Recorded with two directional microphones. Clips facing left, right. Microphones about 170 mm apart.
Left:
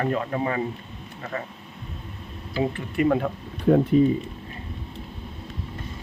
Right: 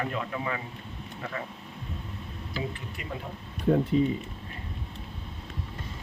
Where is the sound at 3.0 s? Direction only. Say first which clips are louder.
Left 19 dB; 70° left (ahead or behind).